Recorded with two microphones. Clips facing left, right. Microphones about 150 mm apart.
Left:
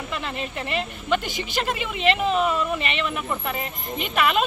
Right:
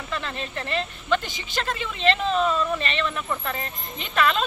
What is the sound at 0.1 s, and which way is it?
Speech, 15° left (ahead or behind).